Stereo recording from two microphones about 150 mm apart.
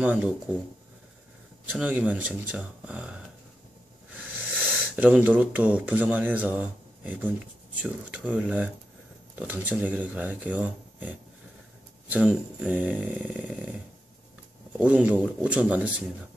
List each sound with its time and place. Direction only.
0.0 s speech: 10° right (ahead or behind)
1.7 s speech: 10° right (ahead or behind)
4.9 s speech: 10° right (ahead or behind)
14.8 s speech: 10° right (ahead or behind)